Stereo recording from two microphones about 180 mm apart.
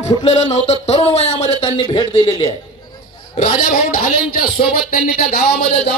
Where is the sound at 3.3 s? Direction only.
45° left (ahead or behind).